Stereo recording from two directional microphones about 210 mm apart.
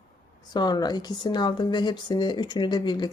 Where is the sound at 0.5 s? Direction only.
20° left (ahead or behind).